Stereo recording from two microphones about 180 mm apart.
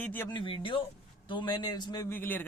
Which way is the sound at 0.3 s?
30° left (ahead or behind).